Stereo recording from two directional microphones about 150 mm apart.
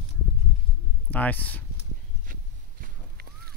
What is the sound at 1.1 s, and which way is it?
Speech, 10° left (ahead or behind).